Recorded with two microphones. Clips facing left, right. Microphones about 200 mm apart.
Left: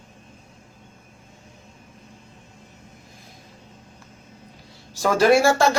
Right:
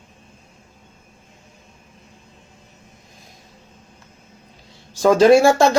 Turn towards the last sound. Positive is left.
turn(degrees=-20)  # may be behind; listen again after turning